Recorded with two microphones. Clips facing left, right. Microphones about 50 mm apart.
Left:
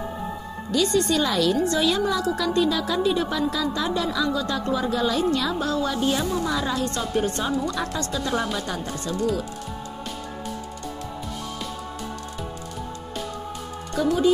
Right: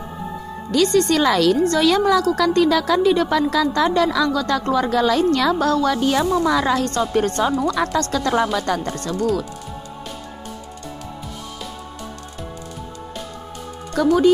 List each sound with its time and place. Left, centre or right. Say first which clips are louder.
0.7 s a woman's voice: right 5 dB; right
1.6 s speech: right 5 dB; right
2.3 s a woman's voice: right 6 dB; right
6.0 s speech: right 6 dB; right
7.2 s speech: right 4 dB; right
7.7 s a woman's voice: right 7 dB; right
8.8 s speech: right 4 dB; right
13.9 s speech: right 5 dB; right